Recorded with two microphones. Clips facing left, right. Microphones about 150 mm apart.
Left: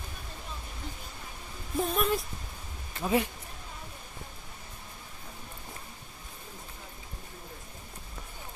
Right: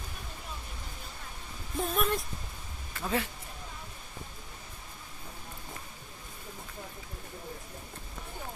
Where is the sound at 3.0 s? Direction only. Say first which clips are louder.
Left 5 dB; 15° left (ahead or behind).